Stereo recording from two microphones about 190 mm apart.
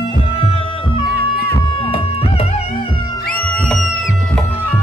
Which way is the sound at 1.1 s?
55° left (ahead or behind).